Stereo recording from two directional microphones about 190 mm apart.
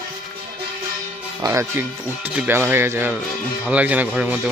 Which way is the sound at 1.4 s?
15° right (ahead or behind).